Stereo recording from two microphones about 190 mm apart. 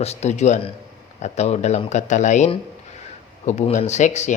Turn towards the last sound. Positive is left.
turn(degrees=40)  # may be behind; listen again after turning